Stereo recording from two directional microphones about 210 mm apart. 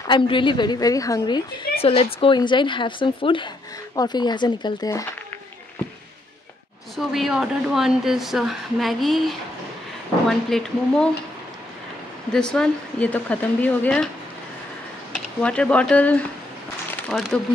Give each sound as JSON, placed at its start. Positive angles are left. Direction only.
{"t": 0.1, "sound": "speech", "side_deg": 25}
{"t": 7.0, "sound": "a woman's voice", "side_deg": 0}
{"t": 12.3, "sound": "speech", "side_deg": 5}
{"t": 15.1, "sound": "a woman's voice", "side_deg": 5}